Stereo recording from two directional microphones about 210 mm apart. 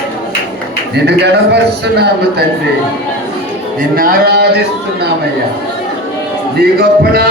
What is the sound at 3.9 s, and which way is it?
Speech, 45° right (ahead or behind).